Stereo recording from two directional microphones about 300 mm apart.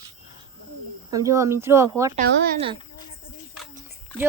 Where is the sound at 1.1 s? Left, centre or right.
Centre.